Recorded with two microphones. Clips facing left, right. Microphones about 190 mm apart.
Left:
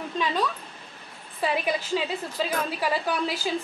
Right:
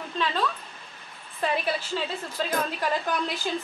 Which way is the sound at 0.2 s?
15° left (ahead or behind).